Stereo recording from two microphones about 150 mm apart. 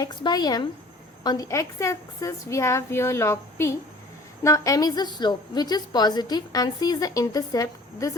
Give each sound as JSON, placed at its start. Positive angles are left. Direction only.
{"t": 0.0, "sound": "a woman's voice", "side_deg": 30}